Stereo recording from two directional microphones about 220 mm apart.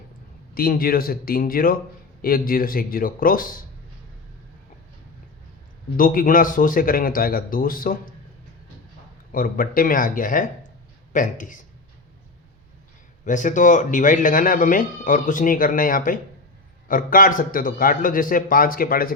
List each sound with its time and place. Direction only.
0.5 s speech: 40° left (ahead or behind)
6.0 s speech: 40° left (ahead or behind)
9.3 s speech: 40° left (ahead or behind)
13.2 s speech: 35° left (ahead or behind)